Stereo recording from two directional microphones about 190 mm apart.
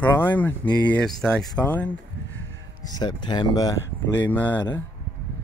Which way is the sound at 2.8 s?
20° left (ahead or behind).